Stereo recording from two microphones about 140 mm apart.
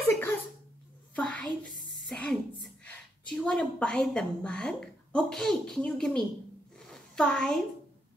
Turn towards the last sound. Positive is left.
turn(degrees=5)  # may be behind; listen again after turning